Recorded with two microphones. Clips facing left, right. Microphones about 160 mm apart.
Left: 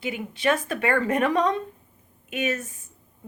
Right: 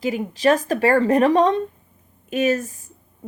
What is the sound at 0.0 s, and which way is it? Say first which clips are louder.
A woman's voice: right 6 dB; 40° right (ahead or behind).